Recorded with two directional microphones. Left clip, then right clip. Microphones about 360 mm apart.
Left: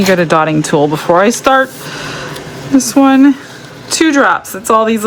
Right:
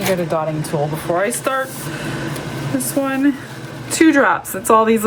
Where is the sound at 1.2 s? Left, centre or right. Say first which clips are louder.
Left 11 dB; centre.